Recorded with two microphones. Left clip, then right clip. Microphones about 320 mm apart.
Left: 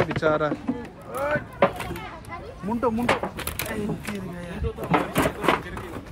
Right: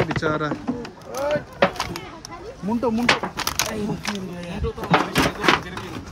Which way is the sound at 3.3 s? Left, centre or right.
Centre.